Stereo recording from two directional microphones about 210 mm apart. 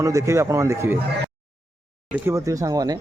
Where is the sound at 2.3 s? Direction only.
15° right (ahead or behind).